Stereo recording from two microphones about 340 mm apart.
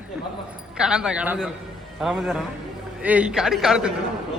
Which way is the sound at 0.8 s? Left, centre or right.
Centre.